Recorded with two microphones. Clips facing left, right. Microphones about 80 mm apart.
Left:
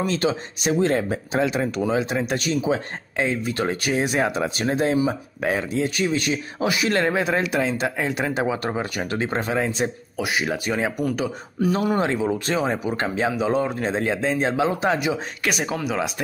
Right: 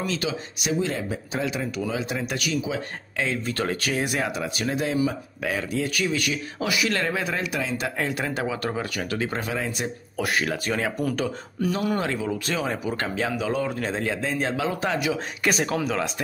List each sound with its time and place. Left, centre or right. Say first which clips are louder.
0.0 s speech: left 5 dB; left
3.3 s speech: left 2 dB; centre
10.1 s speech: right 3 dB; centre
10.4 s speech: left 2 dB; centre
11.7 s speech: left 4 dB; left
15.4 s speech: right 1 dB; centre